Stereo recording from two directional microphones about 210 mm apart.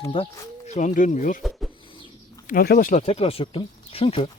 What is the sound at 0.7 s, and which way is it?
Speech, 35° left (ahead or behind).